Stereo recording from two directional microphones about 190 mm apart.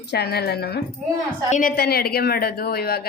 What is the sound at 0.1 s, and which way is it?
Speech, 60° left (ahead or behind).